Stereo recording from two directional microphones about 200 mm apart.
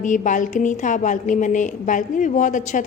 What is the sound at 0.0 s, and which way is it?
A woman's voice, 40° left (ahead or behind).